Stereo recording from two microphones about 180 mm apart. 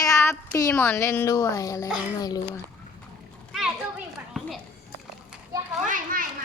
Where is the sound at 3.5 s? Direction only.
Centre (ahead or behind).